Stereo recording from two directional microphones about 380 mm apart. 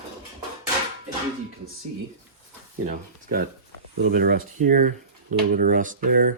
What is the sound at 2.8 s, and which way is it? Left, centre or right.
Speech, right.